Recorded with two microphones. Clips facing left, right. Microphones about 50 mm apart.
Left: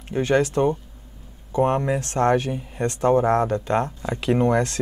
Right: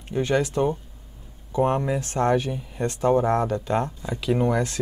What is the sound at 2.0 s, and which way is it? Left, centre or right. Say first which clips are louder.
Speech: left 2 dB; left.